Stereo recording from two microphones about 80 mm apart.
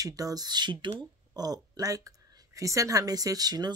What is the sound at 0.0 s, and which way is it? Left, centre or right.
Speech, right.